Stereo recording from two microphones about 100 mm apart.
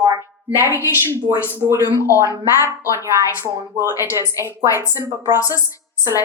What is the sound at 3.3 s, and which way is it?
Speech, 25° right (ahead or behind).